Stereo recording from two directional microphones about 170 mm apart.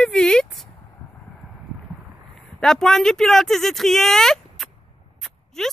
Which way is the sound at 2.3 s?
5° left (ahead or behind).